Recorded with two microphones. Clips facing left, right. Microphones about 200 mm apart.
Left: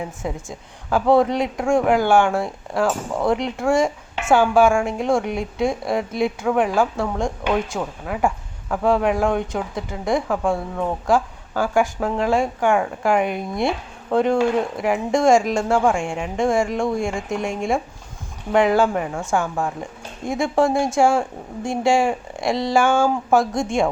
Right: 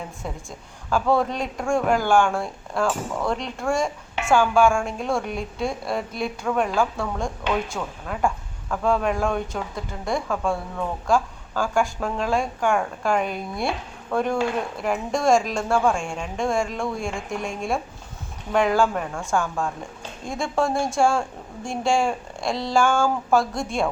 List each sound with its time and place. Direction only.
0.9 s a woman's voice: 20° left (ahead or behind)
12.7 s speech: 5° left (ahead or behind)
13.1 s a woman's voice: 20° left (ahead or behind)